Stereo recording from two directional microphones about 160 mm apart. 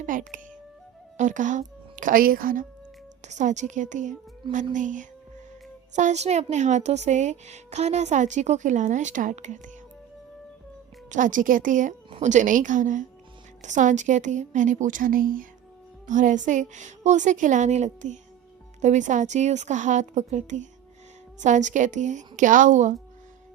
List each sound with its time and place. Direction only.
0.0 s speech: 55° right (ahead or behind)
3.2 s a woman's voice: 50° right (ahead or behind)
11.1 s a woman's voice: 55° right (ahead or behind)